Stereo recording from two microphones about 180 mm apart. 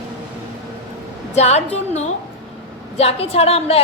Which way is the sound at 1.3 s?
35° left (ahead or behind).